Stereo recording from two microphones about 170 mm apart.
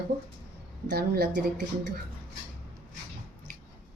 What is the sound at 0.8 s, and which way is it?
Speech, 70° right (ahead or behind).